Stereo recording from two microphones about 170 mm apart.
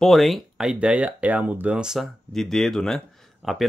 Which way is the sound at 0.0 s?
Centre (ahead or behind).